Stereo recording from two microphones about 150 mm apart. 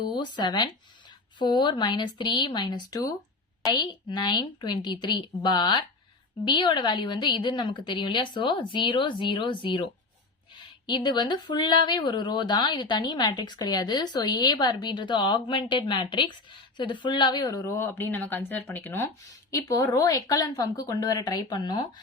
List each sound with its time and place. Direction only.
0.0 s a woman's voice: 30° left (ahead or behind)